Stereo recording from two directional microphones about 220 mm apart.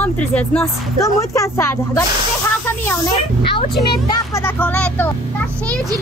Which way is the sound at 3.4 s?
25° left (ahead or behind).